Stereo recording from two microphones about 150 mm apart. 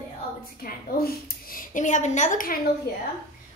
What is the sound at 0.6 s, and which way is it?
A woman's voice, 85° left.